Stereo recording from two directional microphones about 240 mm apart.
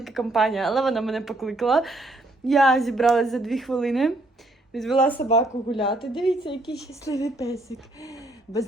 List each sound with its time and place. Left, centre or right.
0.0 s speech: centre
5.3 s a woman's voice: left